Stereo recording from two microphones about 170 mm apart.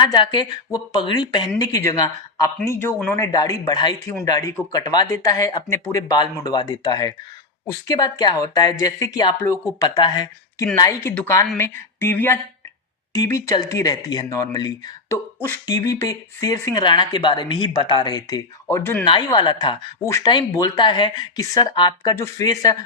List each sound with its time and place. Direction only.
0.0 s speech: 25° left (ahead or behind)
11.1 s speech: 10° left (ahead or behind)
19.0 s speech: 30° left (ahead or behind)